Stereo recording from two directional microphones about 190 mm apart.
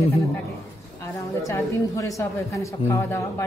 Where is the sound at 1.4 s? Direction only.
15° left (ahead or behind).